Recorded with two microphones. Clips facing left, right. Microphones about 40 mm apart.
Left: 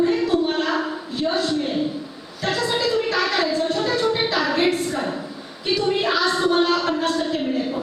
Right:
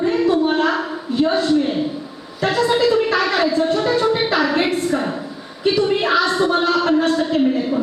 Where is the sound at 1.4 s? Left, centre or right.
Centre.